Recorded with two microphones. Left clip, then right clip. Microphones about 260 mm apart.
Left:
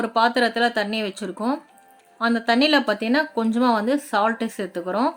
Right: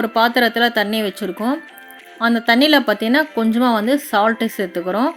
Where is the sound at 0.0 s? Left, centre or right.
Right.